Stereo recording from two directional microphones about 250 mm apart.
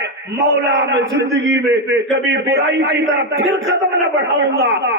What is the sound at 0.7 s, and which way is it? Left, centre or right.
Speech, right.